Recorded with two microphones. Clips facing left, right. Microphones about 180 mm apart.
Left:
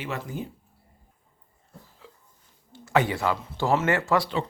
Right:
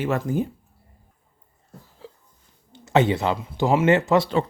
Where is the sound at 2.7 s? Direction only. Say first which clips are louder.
Right 4 dB; 25° right (ahead or behind).